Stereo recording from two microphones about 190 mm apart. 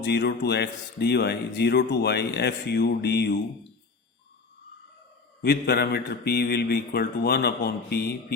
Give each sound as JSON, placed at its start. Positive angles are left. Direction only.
{"t": 0.0, "sound": "speech", "side_deg": 60}
{"t": 5.4, "sound": "speech", "side_deg": 55}